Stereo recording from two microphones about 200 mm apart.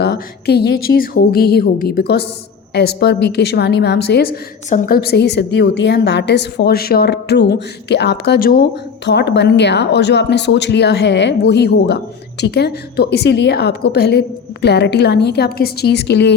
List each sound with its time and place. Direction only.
0.0 s a woman's voice: 55° left (ahead or behind)